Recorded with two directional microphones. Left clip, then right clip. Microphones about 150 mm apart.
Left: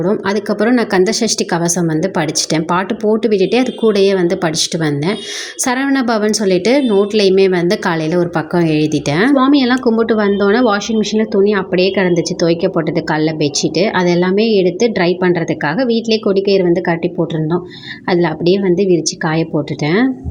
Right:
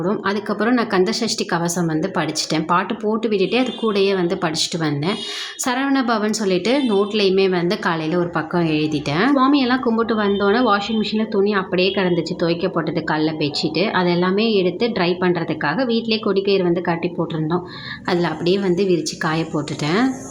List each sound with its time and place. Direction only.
0.0 s a woman's voice: 25° left (ahead or behind)